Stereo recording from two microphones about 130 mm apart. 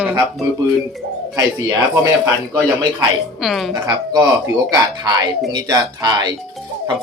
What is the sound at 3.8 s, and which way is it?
Speech, 25° right (ahead or behind).